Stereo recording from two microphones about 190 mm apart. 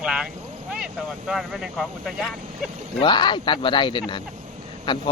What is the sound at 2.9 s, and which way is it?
Speech, 25° left (ahead or behind).